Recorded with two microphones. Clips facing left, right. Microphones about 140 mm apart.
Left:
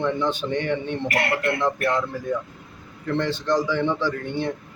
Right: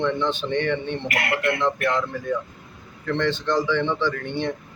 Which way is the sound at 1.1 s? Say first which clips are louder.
Even; 30° left (ahead or behind).